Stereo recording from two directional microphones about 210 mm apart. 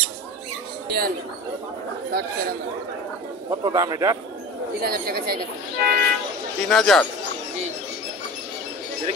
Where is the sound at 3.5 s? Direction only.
20° right (ahead or behind).